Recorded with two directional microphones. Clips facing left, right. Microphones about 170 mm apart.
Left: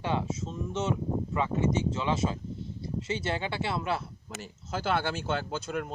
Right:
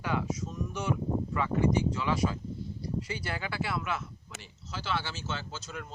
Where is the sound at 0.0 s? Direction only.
25° left (ahead or behind).